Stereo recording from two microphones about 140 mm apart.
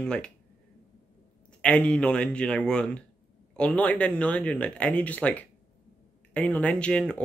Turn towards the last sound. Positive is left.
turn(degrees=5)  # may be behind; listen again after turning